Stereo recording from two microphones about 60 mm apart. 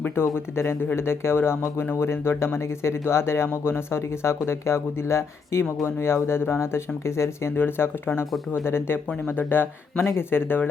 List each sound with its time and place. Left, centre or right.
0.5 s speech: left